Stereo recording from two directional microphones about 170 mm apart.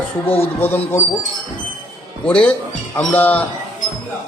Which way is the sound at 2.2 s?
5° left (ahead or behind).